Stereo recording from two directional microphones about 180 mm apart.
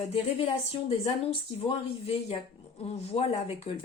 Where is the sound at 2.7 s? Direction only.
35° left (ahead or behind).